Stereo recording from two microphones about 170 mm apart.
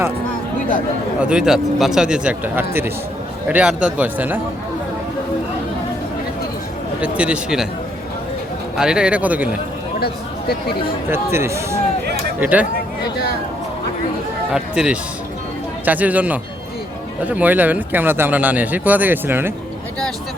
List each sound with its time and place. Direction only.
1.2 s a man's voice: 5° right (ahead or behind)
7.0 s speech: 5° right (ahead or behind)
8.7 s speech: 5° right (ahead or behind)
10.0 s speech: 65° left (ahead or behind)
11.1 s speech: 15° right (ahead or behind)
14.5 s a man's voice: 5° right (ahead or behind)